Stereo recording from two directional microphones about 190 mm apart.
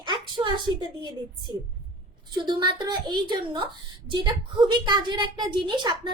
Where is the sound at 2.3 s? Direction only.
25° right (ahead or behind).